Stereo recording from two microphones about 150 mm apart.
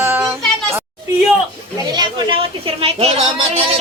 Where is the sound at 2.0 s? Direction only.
30° right (ahead or behind).